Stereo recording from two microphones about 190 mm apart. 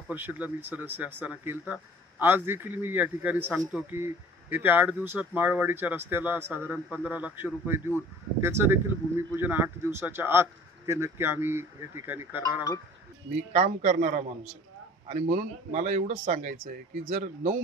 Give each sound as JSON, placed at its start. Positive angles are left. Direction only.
{"t": 0.1, "sound": "speech", "side_deg": -10}
{"t": 13.5, "sound": "speech", "side_deg": -35}